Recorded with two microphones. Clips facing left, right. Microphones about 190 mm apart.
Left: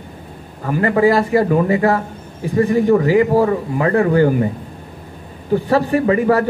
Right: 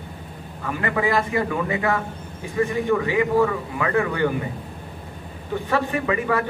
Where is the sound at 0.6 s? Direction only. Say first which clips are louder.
Left 9 dB; 35° left (ahead or behind).